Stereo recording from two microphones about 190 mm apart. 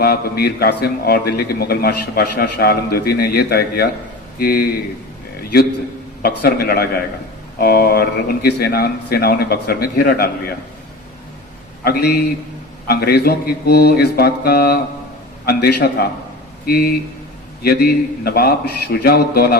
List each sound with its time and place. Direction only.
0.0 s a man's voice: 55° left (ahead or behind)
6.2 s a man's voice: 55° left (ahead or behind)
11.8 s a man's voice: 55° left (ahead or behind)